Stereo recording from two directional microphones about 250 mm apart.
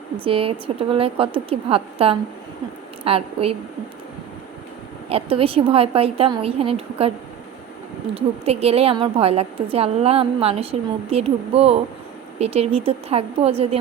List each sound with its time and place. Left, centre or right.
0.3 s a woman's voice: right
5.0 s a woman's voice: right
8.1 s a woman's voice: right